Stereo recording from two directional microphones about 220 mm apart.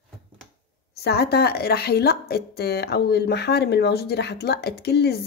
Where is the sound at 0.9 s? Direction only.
45° left (ahead or behind).